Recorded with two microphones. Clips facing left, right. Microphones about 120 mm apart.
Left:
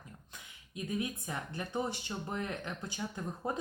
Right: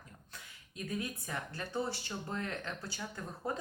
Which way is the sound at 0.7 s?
20° left (ahead or behind).